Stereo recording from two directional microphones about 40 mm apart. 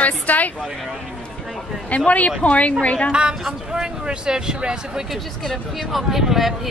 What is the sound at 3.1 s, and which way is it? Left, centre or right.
Speech, right.